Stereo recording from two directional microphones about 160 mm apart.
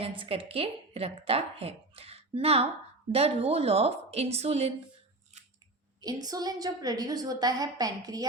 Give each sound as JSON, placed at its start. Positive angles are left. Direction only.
{"t": 0.2, "sound": "speech", "side_deg": -35}
{"t": 6.2, "sound": "a woman's voice", "side_deg": -25}